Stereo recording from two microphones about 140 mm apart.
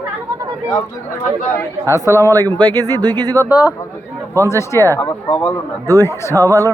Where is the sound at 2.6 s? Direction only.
30° right (ahead or behind).